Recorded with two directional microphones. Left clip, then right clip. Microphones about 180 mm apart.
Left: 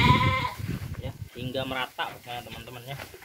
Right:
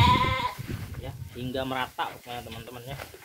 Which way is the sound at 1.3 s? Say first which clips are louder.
Even; 25° right (ahead or behind).